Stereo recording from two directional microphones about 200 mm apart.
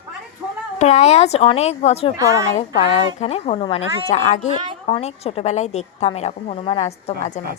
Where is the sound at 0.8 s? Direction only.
35° left (ahead or behind).